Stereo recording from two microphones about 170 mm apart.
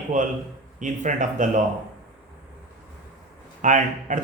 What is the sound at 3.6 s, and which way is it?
Speech, 45° right (ahead or behind).